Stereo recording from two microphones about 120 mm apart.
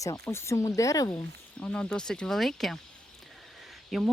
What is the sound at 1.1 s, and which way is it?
Speech, 15° left (ahead or behind).